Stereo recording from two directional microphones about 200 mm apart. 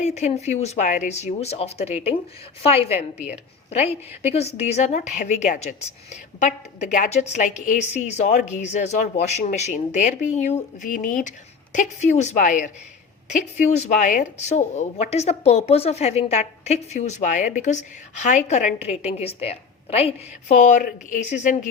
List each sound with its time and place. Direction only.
0.0 s a woman's voice: 35° left (ahead or behind)
4.4 s a woman's voice: 35° left (ahead or behind)